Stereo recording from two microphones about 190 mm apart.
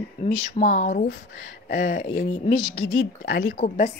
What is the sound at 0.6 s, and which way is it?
Speech, 40° left (ahead or behind).